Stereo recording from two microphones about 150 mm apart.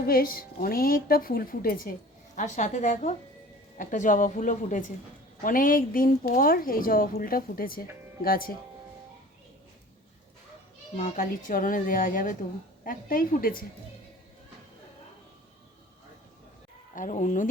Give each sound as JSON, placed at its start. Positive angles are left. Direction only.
{"t": 0.0, "sound": "speech", "side_deg": 75}
{"t": 2.3, "sound": "a woman's voice", "side_deg": 55}
{"t": 10.9, "sound": "speech", "side_deg": 55}
{"t": 16.9, "sound": "speech", "side_deg": 60}